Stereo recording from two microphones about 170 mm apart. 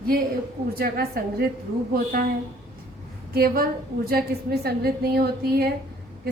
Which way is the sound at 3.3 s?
60° right (ahead or behind).